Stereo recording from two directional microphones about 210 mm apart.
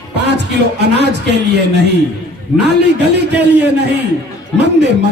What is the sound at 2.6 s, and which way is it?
A man's voice, 55° right (ahead or behind).